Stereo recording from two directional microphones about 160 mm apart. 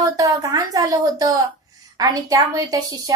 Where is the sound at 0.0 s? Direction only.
20° right (ahead or behind).